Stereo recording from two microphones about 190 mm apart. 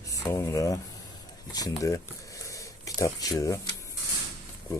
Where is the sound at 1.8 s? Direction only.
15° left (ahead or behind).